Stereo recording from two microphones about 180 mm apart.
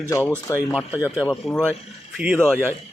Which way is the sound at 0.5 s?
20° left (ahead or behind).